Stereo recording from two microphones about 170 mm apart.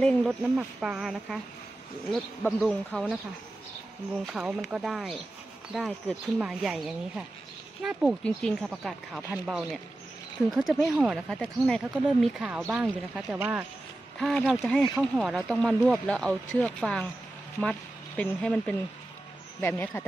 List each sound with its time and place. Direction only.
0.0 s speech: centre (ahead or behind)
4.3 s speech: 5° right (ahead or behind)
14.1 s speech: centre (ahead or behind)